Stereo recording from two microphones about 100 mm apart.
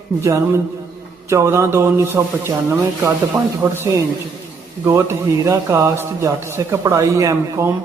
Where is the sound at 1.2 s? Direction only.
30° right (ahead or behind).